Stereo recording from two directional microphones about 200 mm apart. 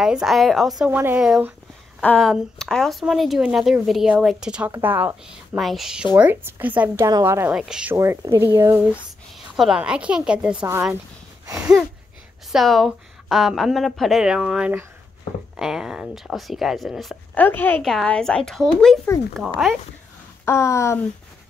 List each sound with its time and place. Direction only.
0.0 s a woman's voice: 5° right (ahead or behind)
11.4 s a sound: 15° right (ahead or behind)
12.5 s speech: centre (ahead or behind)
20.4 s speech: 15° left (ahead or behind)